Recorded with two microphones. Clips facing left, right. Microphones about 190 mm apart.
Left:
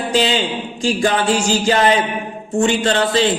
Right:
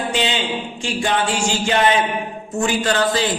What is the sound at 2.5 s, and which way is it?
Speech, 30° left (ahead or behind).